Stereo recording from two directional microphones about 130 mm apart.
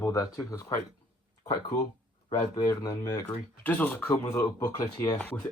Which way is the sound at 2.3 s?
25° left (ahead or behind).